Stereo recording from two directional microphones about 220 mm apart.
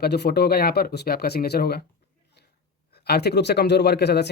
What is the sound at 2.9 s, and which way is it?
Speech, 45° left (ahead or behind).